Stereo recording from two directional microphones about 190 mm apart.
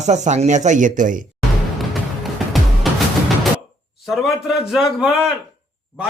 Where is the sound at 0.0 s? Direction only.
40° right (ahead or behind).